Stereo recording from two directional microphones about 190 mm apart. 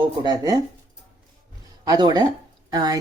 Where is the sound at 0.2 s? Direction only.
20° right (ahead or behind).